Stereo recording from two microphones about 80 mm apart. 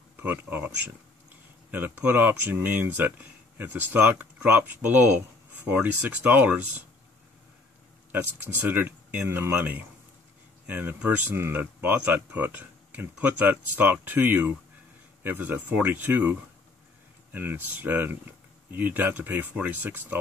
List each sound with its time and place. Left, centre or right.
0.2 s speech: right
1.7 s speech: right
8.6 s speech: right